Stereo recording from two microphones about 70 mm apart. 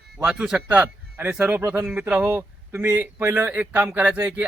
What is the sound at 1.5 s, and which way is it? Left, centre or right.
Speech, right.